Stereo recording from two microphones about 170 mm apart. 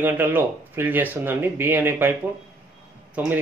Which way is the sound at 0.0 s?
10° right (ahead or behind).